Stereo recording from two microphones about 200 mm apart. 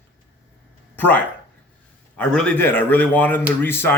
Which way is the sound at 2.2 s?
5° left (ahead or behind).